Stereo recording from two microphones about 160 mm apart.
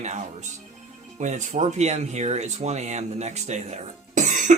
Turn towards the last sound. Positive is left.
turn(degrees=-50)  # may be behind; listen again after turning